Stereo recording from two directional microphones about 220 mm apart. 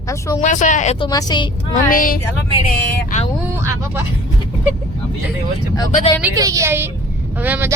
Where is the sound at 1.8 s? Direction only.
40° left (ahead or behind).